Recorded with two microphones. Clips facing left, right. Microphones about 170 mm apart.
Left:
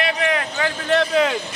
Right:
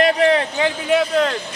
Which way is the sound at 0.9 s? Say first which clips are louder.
Even; 5° right (ahead or behind).